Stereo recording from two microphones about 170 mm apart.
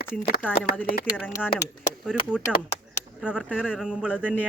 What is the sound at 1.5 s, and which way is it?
Speech, 45° left (ahead or behind).